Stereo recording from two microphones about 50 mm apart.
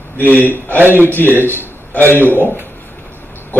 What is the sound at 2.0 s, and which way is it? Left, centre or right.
Speech, right.